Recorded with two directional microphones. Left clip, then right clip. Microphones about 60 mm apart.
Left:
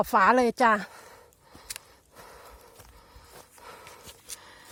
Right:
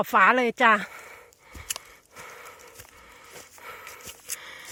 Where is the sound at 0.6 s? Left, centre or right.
Left.